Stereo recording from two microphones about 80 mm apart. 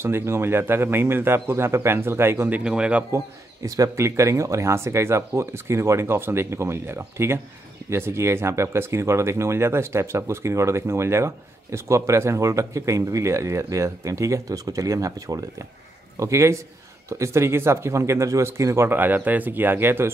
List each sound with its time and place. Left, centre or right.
0.0 s speech: right
2.6 s speech: centre
3.6 s speech: right
18.9 s speech: right